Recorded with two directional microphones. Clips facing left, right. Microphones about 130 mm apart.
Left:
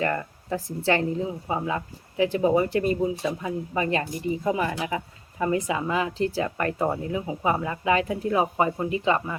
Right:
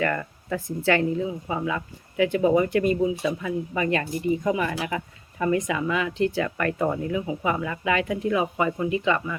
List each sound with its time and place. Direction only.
0.0 s speech: 30° left (ahead or behind)